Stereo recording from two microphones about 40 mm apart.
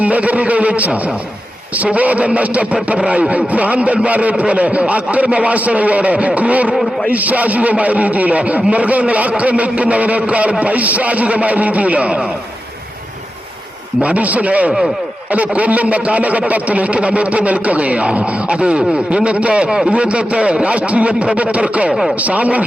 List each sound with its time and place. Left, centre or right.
0.0 s a man's voice: right
14.0 s a man's voice: right